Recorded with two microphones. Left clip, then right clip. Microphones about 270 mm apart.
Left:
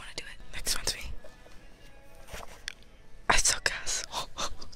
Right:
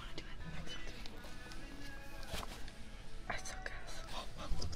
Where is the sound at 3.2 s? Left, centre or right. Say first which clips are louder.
Left 18 dB; left.